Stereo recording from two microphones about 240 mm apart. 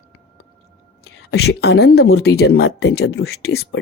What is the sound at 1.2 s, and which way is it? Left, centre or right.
A woman's voice, left.